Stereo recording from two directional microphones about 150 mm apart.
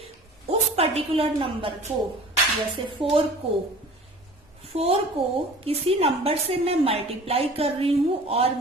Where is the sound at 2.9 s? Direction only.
35° right (ahead or behind).